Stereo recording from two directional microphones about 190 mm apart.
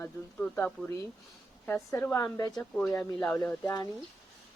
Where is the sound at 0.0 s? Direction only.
10° left (ahead or behind).